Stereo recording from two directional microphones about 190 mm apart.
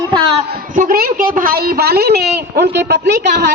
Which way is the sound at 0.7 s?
50° right (ahead or behind).